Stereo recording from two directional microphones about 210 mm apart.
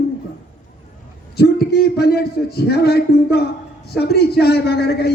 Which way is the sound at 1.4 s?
50° left (ahead or behind).